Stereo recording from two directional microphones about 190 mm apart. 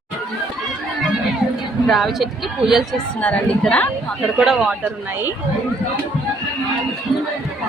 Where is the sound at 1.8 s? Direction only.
Centre (ahead or behind).